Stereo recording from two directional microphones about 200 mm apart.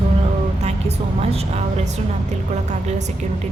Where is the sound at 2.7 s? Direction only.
35° right (ahead or behind).